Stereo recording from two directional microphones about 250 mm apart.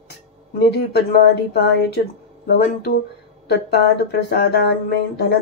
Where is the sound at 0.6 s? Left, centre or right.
Left.